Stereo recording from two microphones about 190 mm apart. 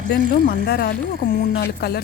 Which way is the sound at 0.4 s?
55° left (ahead or behind).